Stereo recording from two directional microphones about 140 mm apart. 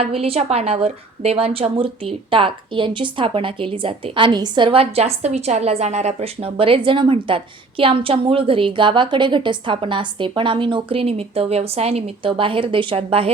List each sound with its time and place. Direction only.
0.0 s a woman's voice: 45° right (ahead or behind)